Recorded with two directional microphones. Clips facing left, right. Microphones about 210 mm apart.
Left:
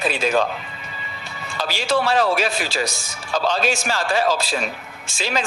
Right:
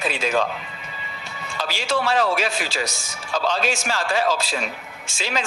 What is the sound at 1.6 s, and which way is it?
A man's voice, 35° left (ahead or behind).